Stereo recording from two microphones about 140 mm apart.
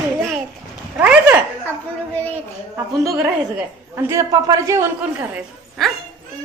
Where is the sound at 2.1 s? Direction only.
15° left (ahead or behind).